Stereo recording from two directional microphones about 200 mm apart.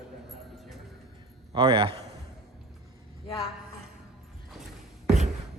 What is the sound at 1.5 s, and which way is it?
Speech, 25° right (ahead or behind).